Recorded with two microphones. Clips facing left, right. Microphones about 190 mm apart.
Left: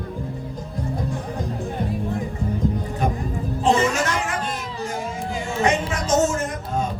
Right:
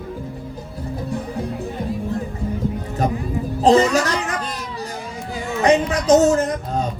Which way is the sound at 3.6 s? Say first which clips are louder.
Right 5 dB; 35° right (ahead or behind).